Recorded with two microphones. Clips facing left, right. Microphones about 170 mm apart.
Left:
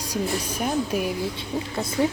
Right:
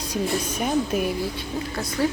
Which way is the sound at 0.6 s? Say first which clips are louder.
Right 1 dB; centre (ahead or behind).